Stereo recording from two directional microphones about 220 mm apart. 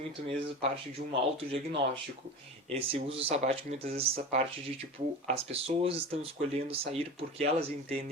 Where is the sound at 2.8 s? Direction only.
25° right (ahead or behind).